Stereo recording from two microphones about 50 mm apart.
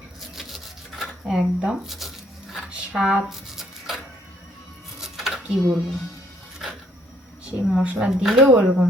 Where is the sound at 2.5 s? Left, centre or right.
Right.